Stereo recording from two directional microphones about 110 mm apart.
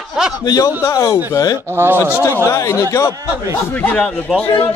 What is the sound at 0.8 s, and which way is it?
Speech, 25° left (ahead or behind).